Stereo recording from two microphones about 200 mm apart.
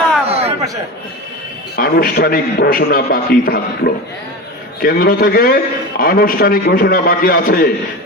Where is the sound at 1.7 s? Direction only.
50° left (ahead or behind).